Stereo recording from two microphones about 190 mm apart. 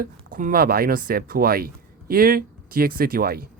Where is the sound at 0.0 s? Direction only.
45° right (ahead or behind).